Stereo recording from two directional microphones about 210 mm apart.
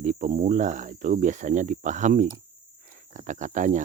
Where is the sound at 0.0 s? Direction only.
35° right (ahead or behind).